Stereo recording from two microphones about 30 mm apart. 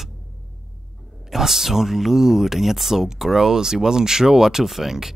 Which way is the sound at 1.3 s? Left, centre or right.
Centre.